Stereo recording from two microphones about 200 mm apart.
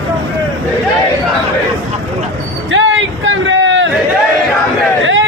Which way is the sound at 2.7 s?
70° right (ahead or behind).